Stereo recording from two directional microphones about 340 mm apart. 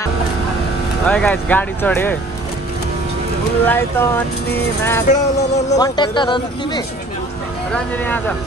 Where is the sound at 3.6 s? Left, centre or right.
Centre.